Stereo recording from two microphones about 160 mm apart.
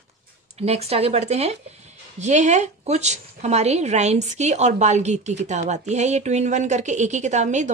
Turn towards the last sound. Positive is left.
turn(degrees=-50)  # may be behind; listen again after turning